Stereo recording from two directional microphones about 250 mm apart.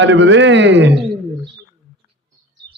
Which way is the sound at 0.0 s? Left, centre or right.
Right.